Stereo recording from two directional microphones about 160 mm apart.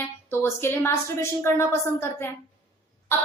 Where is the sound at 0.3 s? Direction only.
15° left (ahead or behind).